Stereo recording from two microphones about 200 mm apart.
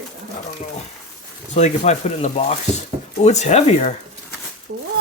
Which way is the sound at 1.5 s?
35° left (ahead or behind).